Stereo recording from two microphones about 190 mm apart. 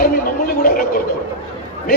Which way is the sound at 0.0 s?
50° left (ahead or behind).